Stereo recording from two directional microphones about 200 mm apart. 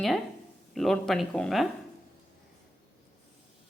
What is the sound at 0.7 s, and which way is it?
Speech, centre (ahead or behind).